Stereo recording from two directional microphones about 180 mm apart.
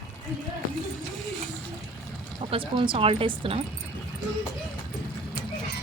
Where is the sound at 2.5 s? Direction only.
30° right (ahead or behind).